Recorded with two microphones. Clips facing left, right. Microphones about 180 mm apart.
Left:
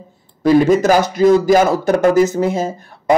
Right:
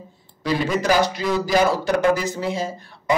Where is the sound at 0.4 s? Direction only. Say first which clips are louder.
Left 11 dB; 45° left (ahead or behind).